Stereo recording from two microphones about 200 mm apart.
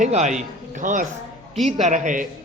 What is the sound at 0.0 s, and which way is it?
A man's voice, 35° right (ahead or behind).